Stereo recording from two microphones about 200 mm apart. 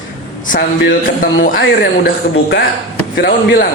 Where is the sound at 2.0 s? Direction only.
55° left (ahead or behind).